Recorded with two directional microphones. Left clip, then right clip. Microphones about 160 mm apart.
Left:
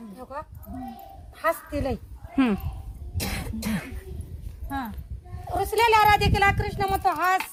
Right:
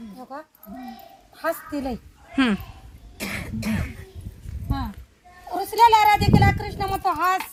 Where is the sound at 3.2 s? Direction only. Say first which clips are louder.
Right 2 dB; 90° left.